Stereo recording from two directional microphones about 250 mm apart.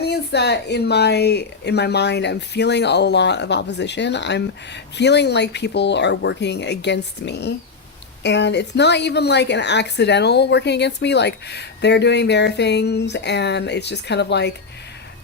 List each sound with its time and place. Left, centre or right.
0.0 s speech: left